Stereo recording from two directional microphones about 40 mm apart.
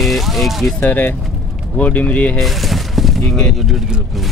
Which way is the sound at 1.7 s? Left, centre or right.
Left.